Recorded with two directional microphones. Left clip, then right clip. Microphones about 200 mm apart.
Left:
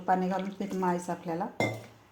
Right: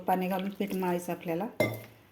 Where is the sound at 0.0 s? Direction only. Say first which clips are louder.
Left 1 dB; 15° right (ahead or behind).